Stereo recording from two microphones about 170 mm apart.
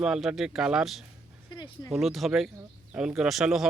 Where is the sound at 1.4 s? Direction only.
25° left (ahead or behind).